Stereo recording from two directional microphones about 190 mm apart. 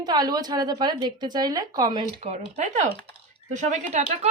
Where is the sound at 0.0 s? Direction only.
20° right (ahead or behind).